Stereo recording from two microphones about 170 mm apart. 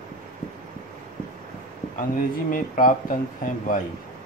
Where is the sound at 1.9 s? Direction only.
50° left (ahead or behind).